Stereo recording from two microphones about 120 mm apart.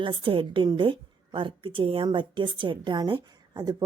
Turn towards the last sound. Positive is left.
turn(degrees=-35)  # may be behind; listen again after turning